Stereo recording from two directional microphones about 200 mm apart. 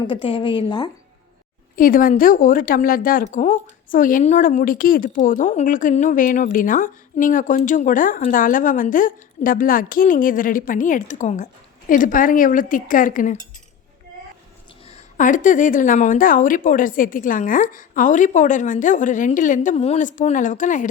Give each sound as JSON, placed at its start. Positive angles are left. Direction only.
{"t": 0.0, "sound": "a woman's voice", "side_deg": 25}
{"t": 1.7, "sound": "a woman's voice", "side_deg": 45}
{"t": 14.8, "sound": "speech", "side_deg": 40}